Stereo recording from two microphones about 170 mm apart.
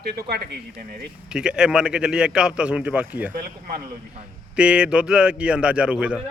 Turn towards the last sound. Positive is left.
turn(degrees=-5)  # may be behind; listen again after turning